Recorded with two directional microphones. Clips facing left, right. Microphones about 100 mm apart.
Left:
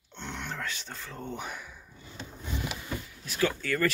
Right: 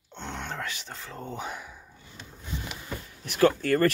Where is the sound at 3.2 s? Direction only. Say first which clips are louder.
Right 8 dB; 60° right (ahead or behind).